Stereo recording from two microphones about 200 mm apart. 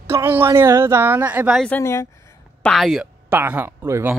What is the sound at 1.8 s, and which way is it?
Speech, 15° left (ahead or behind).